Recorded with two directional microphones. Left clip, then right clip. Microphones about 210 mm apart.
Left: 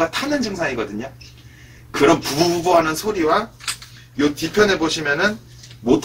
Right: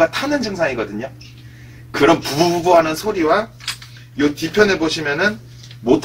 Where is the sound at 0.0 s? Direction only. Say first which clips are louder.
Right 4 dB; 5° right (ahead or behind).